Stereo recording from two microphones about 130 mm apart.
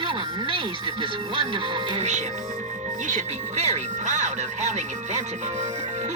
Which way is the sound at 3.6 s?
60° right (ahead or behind).